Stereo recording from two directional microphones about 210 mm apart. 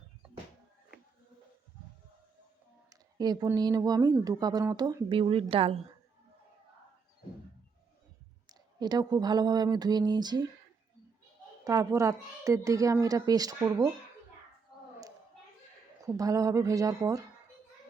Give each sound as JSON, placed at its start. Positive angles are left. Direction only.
{"t": 2.9, "sound": "speech", "side_deg": -20}
{"t": 8.4, "sound": "speech", "side_deg": -20}
{"t": 11.6, "sound": "a woman's voice", "side_deg": -15}
{"t": 16.0, "sound": "a woman's voice", "side_deg": -15}